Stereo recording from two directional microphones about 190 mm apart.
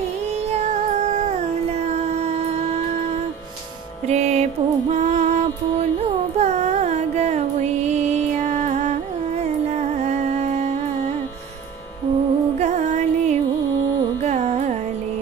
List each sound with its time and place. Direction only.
0.5 s music: 35° right (ahead or behind)
4.1 s music: 35° right (ahead or behind)
6.3 s a sound: 35° right (ahead or behind)
8.4 s music: 40° right (ahead or behind)
12.5 s music: 35° right (ahead or behind)
14.2 s carnatic music: 40° right (ahead or behind)